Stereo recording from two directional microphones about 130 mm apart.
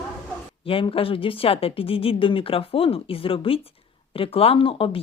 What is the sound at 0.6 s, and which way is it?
Speech, 45° left (ahead or behind).